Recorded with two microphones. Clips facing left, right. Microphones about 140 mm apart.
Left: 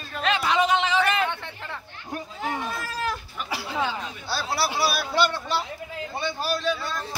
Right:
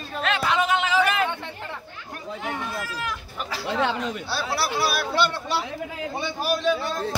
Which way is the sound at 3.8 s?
80° right.